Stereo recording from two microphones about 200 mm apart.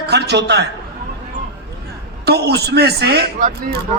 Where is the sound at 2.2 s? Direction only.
55° right (ahead or behind).